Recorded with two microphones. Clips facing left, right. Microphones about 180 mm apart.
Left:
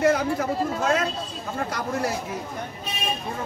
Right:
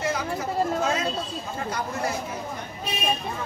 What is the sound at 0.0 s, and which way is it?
Speech, 60° left (ahead or behind).